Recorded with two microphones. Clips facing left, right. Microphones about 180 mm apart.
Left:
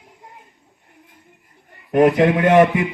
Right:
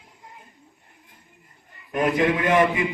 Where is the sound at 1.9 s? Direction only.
65° left (ahead or behind).